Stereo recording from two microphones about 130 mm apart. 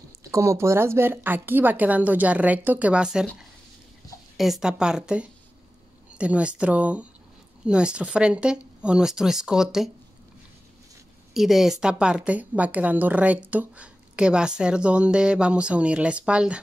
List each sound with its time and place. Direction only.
0.2 s speech: 25° right (ahead or behind); by 3.3 s 5° right (ahead or behind)
4.4 s speech: 5° right (ahead or behind)
11.3 s speech: centre (ahead or behind)